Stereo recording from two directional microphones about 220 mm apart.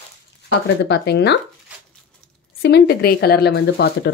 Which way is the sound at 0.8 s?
50° left (ahead or behind).